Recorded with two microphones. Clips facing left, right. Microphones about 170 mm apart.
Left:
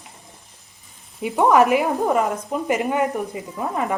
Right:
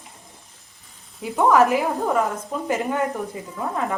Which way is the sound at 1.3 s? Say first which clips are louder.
Left 1 dB; 15° left (ahead or behind).